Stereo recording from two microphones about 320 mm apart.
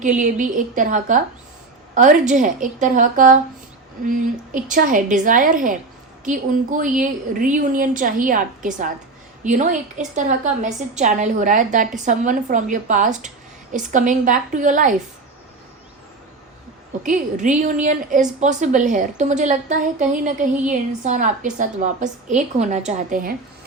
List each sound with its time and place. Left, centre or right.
0.2 s a woman's voice: right
4.5 s a woman's voice: right
17.0 s a woman's voice: right